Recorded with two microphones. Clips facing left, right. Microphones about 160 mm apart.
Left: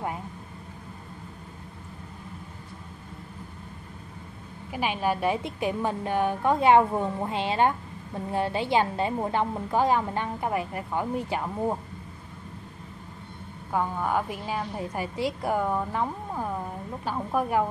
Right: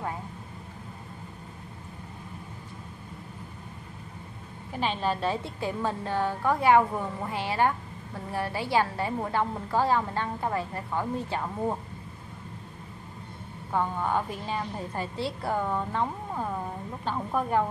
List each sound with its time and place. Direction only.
4.7 s a woman's voice: 10° left (ahead or behind)
13.7 s a woman's voice: 5° left (ahead or behind)